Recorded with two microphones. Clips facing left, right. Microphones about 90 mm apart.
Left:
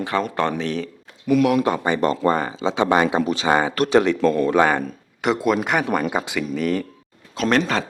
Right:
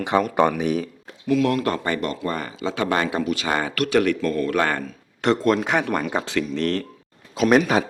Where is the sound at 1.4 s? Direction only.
15° left (ahead or behind).